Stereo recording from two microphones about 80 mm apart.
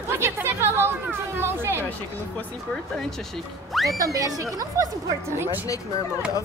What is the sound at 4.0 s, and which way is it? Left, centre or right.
Speech, right.